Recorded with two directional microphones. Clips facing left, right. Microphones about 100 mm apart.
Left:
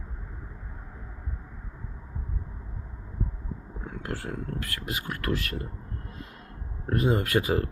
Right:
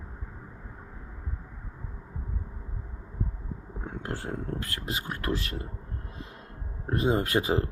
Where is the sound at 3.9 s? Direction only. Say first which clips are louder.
Even; 30° right (ahead or behind).